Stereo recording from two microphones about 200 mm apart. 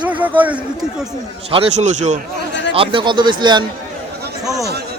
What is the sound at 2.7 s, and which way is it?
Speech, 25° right (ahead or behind).